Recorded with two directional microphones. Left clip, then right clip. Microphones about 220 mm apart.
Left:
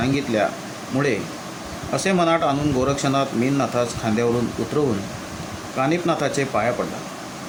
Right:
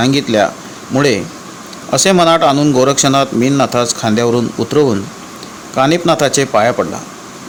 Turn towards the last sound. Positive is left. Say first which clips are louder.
# right 10 dB
turn(degrees=-35)  # may be behind; listen again after turning